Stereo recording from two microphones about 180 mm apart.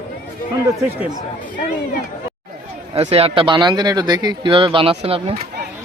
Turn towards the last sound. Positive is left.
turn(degrees=-30)  # may be behind; listen again after turning